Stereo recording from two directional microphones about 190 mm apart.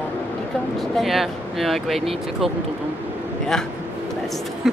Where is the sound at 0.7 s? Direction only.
Centre (ahead or behind).